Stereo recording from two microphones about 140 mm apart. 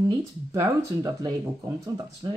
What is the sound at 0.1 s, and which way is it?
Speech, 25° right (ahead or behind).